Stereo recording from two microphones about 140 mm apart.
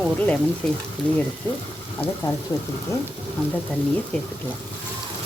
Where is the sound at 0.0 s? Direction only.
10° left (ahead or behind).